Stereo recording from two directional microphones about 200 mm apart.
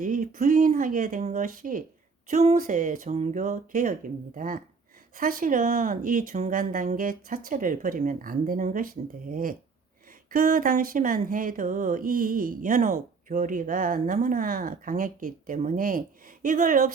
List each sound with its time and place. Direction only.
0.0 s speech: 40° right (ahead or behind)